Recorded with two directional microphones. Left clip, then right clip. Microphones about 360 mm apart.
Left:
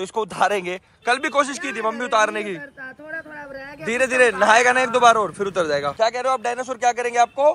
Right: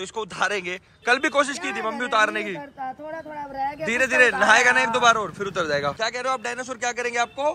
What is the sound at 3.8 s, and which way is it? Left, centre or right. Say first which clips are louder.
A man's voice: left 2 dB; centre.